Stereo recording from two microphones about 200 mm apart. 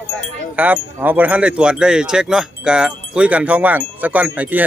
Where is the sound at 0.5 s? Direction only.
10° right (ahead or behind).